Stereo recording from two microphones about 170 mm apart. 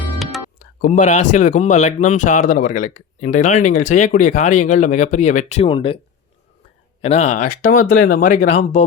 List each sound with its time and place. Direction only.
0.2 s music: centre (ahead or behind)
0.6 s speech: 55° left (ahead or behind); by 6.0 s 30° left (ahead or behind)
7.0 s speech: 40° left (ahead or behind)